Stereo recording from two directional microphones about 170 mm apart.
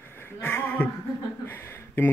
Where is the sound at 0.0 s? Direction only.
15° left (ahead or behind).